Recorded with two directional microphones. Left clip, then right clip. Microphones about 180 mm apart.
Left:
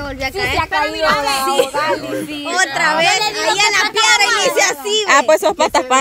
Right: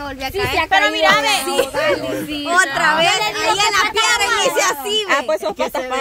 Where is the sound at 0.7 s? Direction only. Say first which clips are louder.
Right 6 dB; 45° right (ahead or behind).